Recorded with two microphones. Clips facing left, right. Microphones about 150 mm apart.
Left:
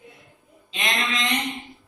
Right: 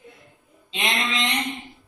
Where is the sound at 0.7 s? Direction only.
25° right (ahead or behind).